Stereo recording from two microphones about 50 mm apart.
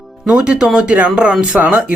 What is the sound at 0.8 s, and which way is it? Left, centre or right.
Speech, right.